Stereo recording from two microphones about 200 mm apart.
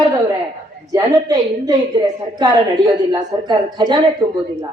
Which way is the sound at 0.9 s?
20° right (ahead or behind).